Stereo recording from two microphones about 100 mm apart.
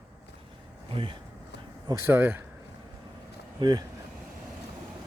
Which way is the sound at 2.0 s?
20° right (ahead or behind).